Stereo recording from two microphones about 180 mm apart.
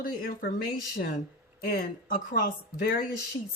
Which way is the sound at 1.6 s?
55° left (ahead or behind).